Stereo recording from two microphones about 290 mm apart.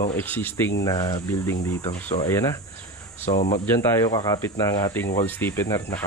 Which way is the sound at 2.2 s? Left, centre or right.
Centre.